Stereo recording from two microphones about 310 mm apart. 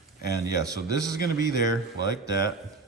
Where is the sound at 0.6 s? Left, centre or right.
Centre.